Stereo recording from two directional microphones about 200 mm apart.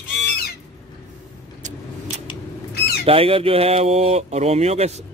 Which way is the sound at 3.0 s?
30° right (ahead or behind).